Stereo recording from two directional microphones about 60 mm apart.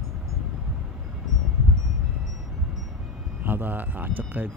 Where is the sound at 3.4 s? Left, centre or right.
Right.